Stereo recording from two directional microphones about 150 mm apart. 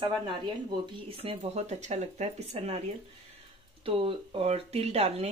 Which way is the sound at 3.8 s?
35° right (ahead or behind).